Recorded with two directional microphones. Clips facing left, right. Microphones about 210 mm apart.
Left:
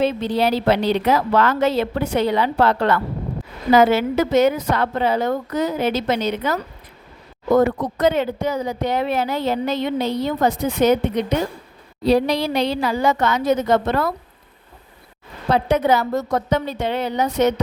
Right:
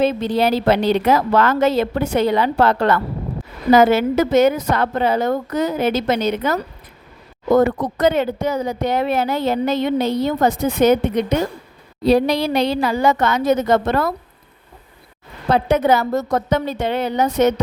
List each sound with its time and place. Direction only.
0.0 s speech: 45° right (ahead or behind)
15.5 s speech: 50° right (ahead or behind)